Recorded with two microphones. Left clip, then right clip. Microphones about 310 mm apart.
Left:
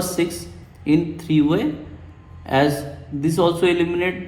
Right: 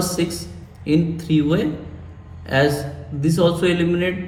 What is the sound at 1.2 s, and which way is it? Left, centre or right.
Speech, centre.